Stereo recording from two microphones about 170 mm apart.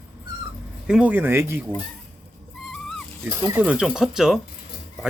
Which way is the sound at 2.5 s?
5° left (ahead or behind).